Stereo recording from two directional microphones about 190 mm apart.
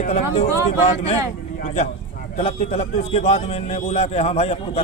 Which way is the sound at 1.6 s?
30° left (ahead or behind).